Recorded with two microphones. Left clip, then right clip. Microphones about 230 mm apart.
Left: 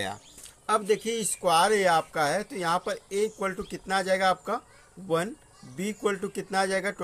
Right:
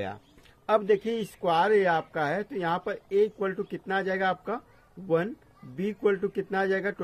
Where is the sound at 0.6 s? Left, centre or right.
Centre.